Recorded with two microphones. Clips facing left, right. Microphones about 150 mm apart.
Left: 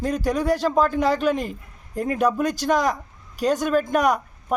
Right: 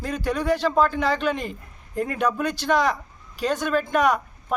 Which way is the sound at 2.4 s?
40° left (ahead or behind).